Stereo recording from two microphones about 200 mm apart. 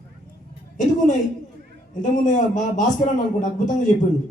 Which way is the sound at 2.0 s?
40° left (ahead or behind).